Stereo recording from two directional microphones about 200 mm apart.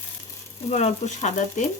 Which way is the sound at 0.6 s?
35° left (ahead or behind).